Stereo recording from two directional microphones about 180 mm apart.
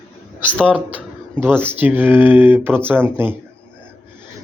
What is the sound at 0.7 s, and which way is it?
Speech, 10° right (ahead or behind).